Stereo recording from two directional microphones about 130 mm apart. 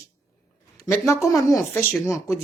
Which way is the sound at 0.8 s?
25° left (ahead or behind).